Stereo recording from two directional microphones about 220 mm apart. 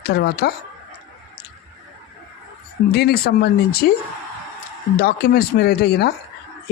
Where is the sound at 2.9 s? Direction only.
45° left (ahead or behind).